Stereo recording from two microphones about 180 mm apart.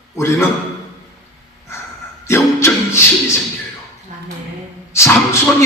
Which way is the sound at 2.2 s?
15° left (ahead or behind).